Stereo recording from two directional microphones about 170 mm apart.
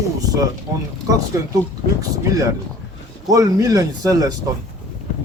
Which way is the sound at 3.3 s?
20° right (ahead or behind).